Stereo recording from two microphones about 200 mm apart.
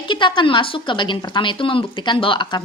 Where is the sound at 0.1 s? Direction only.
25° left (ahead or behind).